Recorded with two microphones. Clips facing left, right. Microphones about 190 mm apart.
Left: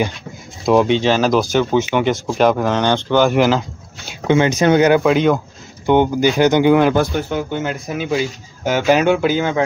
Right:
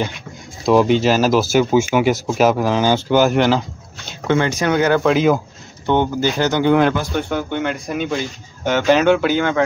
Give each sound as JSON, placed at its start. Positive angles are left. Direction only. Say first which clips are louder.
{"t": 0.7, "sound": "speech", "louder": "even", "side_deg": 0}
{"t": 4.3, "sound": "speech", "louder": "left 4 dB", "side_deg": 20}
{"t": 5.0, "sound": "speech", "louder": "left 1 dB", "side_deg": 0}
{"t": 5.9, "sound": "speech", "louder": "left 3 dB", "side_deg": 15}
{"t": 7.2, "sound": "speech", "louder": "even", "side_deg": 5}